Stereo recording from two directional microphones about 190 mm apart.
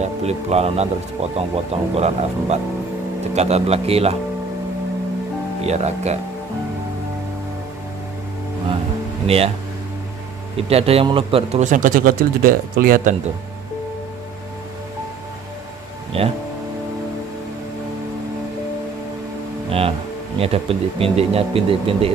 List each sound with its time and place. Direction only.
0.0 s a man's voice: 35° right (ahead or behind)
5.6 s a man's voice: 35° right (ahead or behind)
9.2 s speech: 30° right (ahead or behind)
10.7 s a man's voice: 30° right (ahead or behind); by 13.1 s 50° right (ahead or behind)
16.1 s speech: 30° right (ahead or behind)
20.3 s a man's voice: 30° right (ahead or behind)